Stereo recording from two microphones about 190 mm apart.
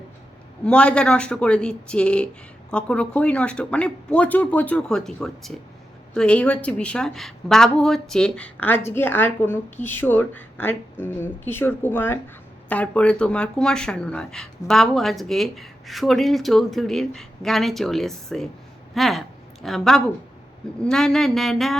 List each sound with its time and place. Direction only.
0.6 s a woman's voice: 5° left (ahead or behind)